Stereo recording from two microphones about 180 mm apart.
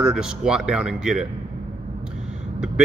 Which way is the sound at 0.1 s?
5° right (ahead or behind).